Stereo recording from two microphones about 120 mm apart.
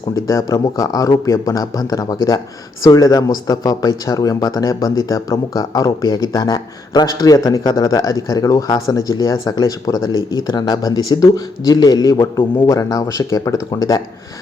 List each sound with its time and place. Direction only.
0.1 s speech: 30° left (ahead or behind)